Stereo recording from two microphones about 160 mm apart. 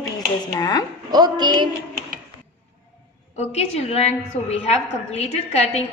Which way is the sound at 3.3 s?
40° left (ahead or behind).